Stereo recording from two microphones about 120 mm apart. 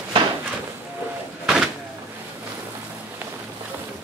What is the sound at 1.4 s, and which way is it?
Vehicle, 5° right (ahead or behind).